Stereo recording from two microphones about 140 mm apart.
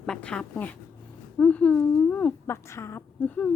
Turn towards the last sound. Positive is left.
turn(degrees=10)  # may be behind; listen again after turning